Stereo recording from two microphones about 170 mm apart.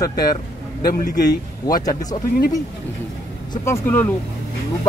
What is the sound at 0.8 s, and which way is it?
Speech, 60° left (ahead or behind).